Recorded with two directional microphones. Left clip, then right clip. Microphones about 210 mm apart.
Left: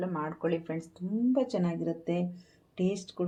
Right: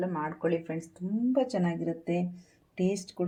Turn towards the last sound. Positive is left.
turn(degrees=0)  # may be behind; listen again after turning